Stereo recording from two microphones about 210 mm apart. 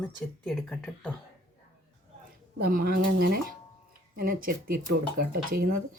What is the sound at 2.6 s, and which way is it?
Speech, 45° right (ahead or behind).